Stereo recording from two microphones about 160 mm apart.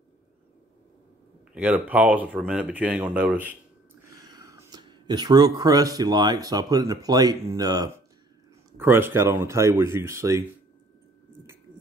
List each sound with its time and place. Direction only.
1.5 s speech: 10° right (ahead or behind)
4.1 s speech: 25° right (ahead or behind)
8.7 s speech: 15° right (ahead or behind)